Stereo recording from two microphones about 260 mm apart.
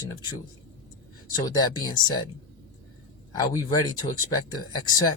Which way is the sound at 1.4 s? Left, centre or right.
Centre.